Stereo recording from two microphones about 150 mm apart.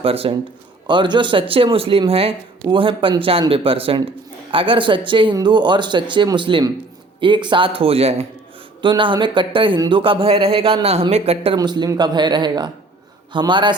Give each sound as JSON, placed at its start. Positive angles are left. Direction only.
{"t": 0.0, "sound": "speech", "side_deg": -40}
{"t": 11.5, "sound": "a woman's voice", "side_deg": -30}